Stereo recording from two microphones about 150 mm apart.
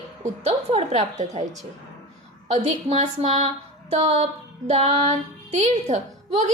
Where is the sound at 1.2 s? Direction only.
50° right (ahead or behind).